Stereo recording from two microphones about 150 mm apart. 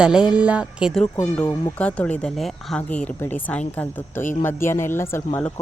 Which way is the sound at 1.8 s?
10° left (ahead or behind).